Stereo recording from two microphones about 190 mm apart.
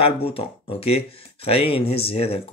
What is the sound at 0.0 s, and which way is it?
Speech, 30° left (ahead or behind).